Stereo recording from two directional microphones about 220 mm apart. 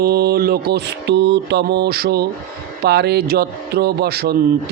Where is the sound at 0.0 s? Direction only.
45° right (ahead or behind).